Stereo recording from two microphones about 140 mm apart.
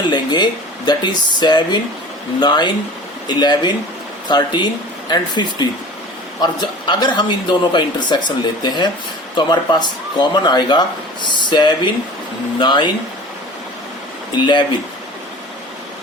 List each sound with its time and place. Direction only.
0.0 s a man's voice: 30° left (ahead or behind)
14.3 s a man's voice: 35° left (ahead or behind)